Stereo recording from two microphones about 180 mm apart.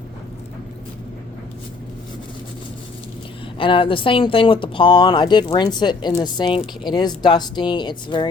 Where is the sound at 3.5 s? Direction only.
30° left (ahead or behind).